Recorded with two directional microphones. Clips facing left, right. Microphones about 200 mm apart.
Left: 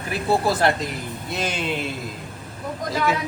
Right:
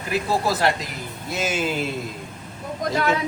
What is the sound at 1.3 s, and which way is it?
Speech, centre (ahead or behind).